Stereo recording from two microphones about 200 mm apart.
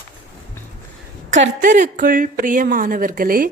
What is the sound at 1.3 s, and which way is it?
Speech, 70° right (ahead or behind).